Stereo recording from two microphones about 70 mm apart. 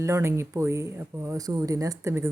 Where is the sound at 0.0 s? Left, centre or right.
Right.